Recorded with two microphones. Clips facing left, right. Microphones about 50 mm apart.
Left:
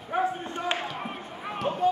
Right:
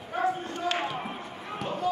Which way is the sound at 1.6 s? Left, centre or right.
Left.